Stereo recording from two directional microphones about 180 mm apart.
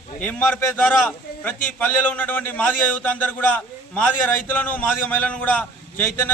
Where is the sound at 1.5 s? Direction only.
10° left (ahead or behind).